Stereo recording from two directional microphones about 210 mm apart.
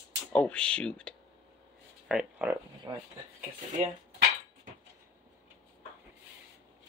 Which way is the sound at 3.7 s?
35° right (ahead or behind).